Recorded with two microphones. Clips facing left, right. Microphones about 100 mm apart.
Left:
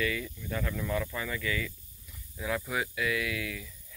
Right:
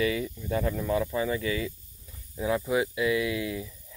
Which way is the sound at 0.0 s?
25° right (ahead or behind).